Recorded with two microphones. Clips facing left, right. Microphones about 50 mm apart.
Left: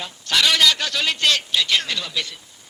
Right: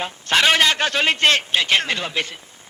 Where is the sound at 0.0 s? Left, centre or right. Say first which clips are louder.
Right 3 dB; right.